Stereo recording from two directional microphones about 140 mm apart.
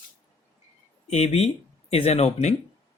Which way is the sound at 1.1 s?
50° left (ahead or behind).